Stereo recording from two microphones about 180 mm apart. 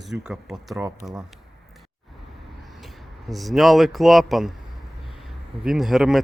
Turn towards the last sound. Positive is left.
turn(degrees=0)  # may be behind; listen again after turning